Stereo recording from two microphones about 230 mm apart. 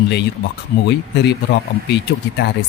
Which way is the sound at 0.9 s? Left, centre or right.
Left.